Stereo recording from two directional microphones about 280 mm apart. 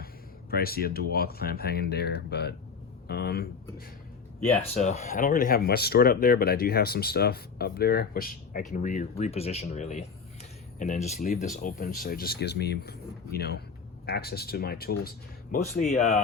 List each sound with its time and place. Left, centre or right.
0.5 s speech: left